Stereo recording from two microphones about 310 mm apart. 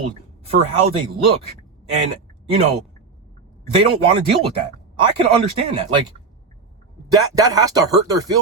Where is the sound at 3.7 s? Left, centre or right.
Centre.